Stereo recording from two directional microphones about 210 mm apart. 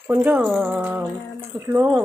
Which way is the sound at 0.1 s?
5° right (ahead or behind).